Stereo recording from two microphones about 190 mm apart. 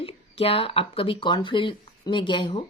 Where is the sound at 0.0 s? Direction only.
30° left (ahead or behind).